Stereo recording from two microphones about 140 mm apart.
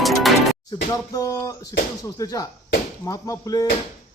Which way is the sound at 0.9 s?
25° left (ahead or behind).